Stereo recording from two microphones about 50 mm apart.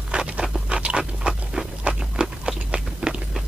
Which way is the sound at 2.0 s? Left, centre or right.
Centre.